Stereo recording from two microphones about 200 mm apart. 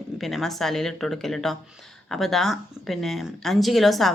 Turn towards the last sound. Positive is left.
turn(degrees=0)  # may be behind; listen again after turning